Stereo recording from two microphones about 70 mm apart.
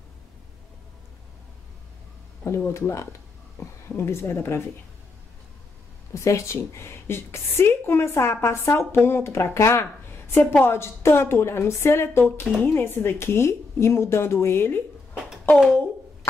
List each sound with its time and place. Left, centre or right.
2.4 s speech: left
6.1 s a woman's voice: left